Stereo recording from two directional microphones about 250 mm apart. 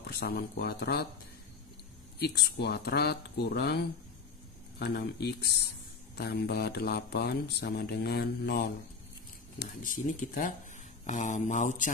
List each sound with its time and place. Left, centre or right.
0.0 s speech: left
2.1 s speech: left